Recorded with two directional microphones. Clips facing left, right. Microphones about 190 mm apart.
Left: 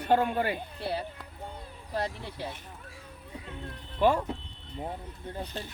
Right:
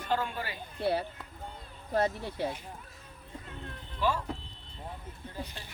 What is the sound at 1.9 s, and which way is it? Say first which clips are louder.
Speech: right 4 dB; 50° right (ahead or behind).